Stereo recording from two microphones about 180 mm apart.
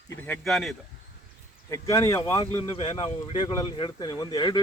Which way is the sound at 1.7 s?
15° left (ahead or behind).